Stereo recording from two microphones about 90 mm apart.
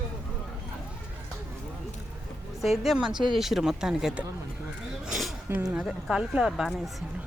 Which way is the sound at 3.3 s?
5° right (ahead or behind).